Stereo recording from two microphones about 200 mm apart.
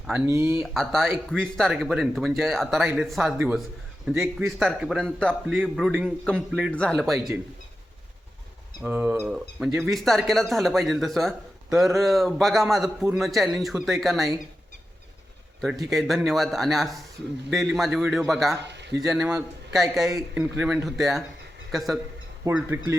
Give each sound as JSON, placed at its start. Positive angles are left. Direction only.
{"t": 0.1, "sound": "speech", "side_deg": -10}
{"t": 0.6, "sound": "speech", "side_deg": 0}
{"t": 8.8, "sound": "speech", "side_deg": -5}
{"t": 15.6, "sound": "speech", "side_deg": 0}
{"t": 18.6, "sound": "a sound", "side_deg": -60}
{"t": 18.9, "sound": "a man's voice", "side_deg": 0}